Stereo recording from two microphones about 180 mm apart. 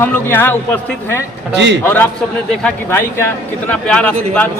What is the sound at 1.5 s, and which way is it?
Speech, 75° right (ahead or behind).